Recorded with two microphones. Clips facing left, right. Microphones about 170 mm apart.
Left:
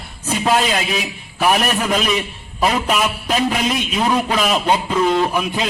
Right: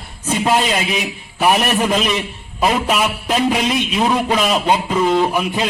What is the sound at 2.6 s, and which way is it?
Speech, centre (ahead or behind).